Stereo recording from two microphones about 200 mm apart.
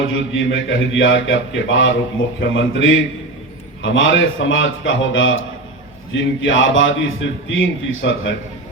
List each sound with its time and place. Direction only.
0.1 s a man's voice: 70° left (ahead or behind)